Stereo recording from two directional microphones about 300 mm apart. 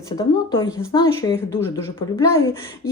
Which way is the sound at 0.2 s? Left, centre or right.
Centre.